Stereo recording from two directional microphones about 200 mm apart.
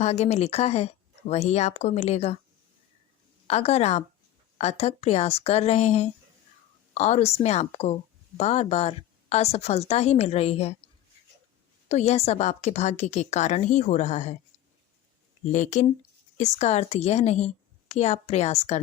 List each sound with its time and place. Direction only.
0.0 s a woman's voice: 35° left (ahead or behind)
3.4 s a woman's voice: 30° left (ahead or behind)
11.9 s a woman's voice: 35° left (ahead or behind)
15.5 s a woman's voice: 40° left (ahead or behind)